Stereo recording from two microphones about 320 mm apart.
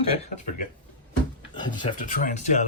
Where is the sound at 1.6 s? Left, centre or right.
Centre.